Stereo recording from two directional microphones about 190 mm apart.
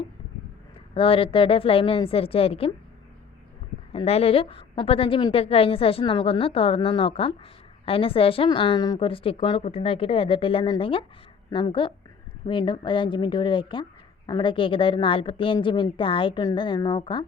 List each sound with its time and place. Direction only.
0.9 s a woman's voice: 30° left (ahead or behind)
3.9 s a woman's voice: 30° left (ahead or behind)